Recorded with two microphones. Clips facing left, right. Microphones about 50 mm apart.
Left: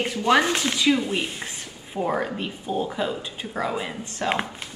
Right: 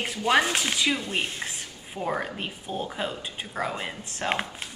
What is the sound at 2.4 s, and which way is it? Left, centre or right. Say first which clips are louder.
Speech: left 5 dB; centre.